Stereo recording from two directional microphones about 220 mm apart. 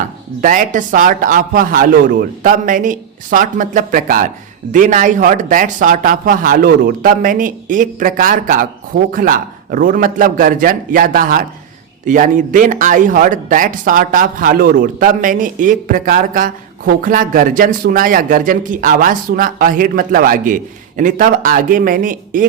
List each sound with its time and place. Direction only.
0.4 s speech: 35° right (ahead or behind)